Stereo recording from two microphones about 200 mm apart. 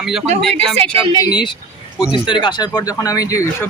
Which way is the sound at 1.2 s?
20° left (ahead or behind).